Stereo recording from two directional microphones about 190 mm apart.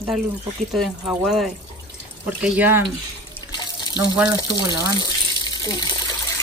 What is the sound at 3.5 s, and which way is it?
Water, 20° left (ahead or behind).